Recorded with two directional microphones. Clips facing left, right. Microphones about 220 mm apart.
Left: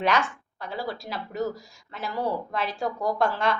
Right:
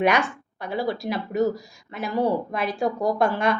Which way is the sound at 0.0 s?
15° right (ahead or behind).